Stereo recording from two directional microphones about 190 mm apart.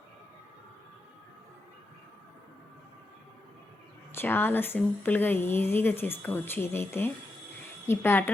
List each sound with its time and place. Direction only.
4.1 s speech: 10° left (ahead or behind)